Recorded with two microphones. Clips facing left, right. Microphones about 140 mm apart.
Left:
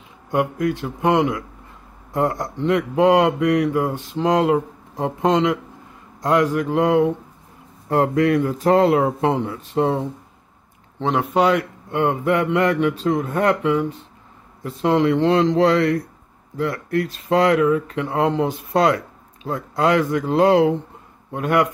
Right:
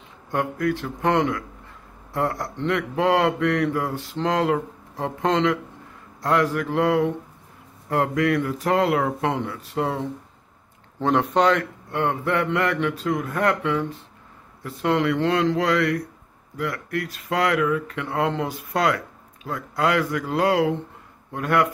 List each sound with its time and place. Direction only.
0.3 s speech: 15° left (ahead or behind)
11.0 s speech: centre (ahead or behind); by 21.6 s 20° left (ahead or behind)